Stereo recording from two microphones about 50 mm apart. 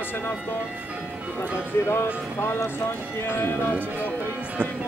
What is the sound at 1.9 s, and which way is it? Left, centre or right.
Speech, left.